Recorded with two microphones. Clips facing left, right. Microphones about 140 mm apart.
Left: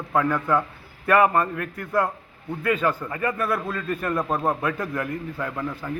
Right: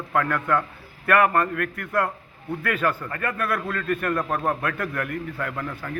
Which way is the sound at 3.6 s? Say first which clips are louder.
Even; 15° left (ahead or behind).